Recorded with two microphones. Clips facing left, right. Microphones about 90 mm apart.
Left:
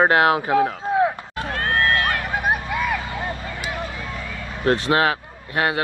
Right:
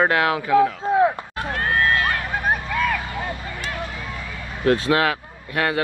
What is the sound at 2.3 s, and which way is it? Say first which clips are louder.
Vehicle: left 1 dB; 15° left (ahead or behind).